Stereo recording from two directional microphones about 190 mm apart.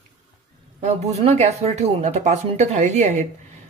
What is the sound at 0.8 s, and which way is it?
A woman's voice, 35° right (ahead or behind).